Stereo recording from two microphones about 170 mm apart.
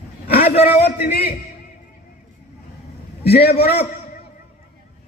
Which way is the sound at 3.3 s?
70° left (ahead or behind).